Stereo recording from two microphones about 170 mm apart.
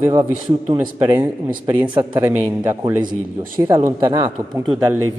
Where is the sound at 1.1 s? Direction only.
10° right (ahead or behind).